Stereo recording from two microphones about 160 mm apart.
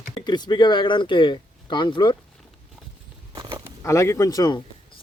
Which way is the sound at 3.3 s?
30° right (ahead or behind).